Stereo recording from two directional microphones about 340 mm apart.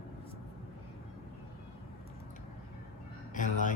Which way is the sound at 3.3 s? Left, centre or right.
Left.